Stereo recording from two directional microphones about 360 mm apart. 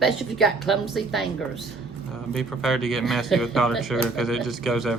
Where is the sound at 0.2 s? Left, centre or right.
Centre.